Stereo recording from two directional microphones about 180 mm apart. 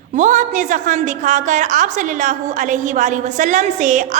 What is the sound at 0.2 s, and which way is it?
A woman's voice, 45° right (ahead or behind).